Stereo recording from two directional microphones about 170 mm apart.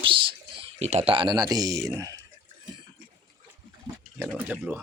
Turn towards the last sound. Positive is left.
turn(degrees=-10)  # may be behind; listen again after turning